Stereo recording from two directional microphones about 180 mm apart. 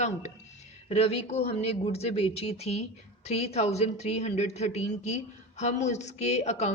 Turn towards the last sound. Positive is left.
turn(degrees=40)  # may be behind; listen again after turning